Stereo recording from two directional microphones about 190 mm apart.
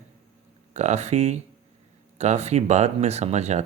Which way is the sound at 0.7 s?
35° right (ahead or behind).